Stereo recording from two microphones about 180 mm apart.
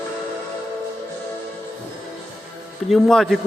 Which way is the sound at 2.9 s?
Centre (ahead or behind).